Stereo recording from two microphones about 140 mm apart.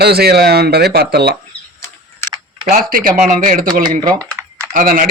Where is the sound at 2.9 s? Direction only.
70° right (ahead or behind).